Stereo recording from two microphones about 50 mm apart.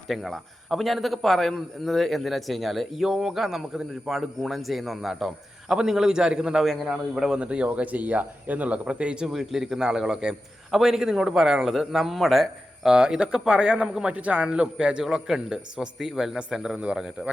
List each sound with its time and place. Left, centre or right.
0.1 s a man's voice: centre
7.3 s speech: right
9.3 s a man's voice: centre
12.9 s a man's voice: centre